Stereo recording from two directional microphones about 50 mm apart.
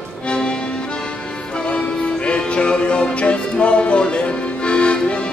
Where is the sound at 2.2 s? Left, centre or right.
Left.